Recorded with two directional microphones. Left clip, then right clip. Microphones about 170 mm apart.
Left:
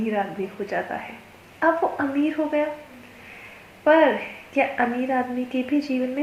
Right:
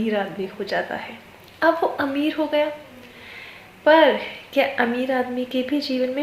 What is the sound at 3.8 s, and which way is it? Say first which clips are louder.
A woman's voice: right 2 dB; 35° right (ahead or behind).